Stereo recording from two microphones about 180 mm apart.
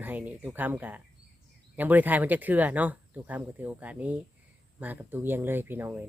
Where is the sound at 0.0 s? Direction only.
10° right (ahead or behind).